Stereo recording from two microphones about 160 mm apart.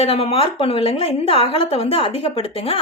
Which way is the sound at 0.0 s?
40° left (ahead or behind).